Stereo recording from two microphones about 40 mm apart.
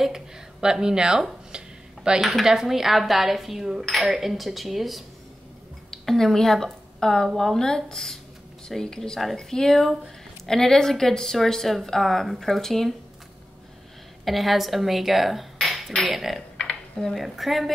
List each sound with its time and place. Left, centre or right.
0.0 s speech: centre
1.5 s a sound: right
2.0 s a woman's voice: centre
5.9 s a woman's voice: centre
14.2 s a woman's voice: centre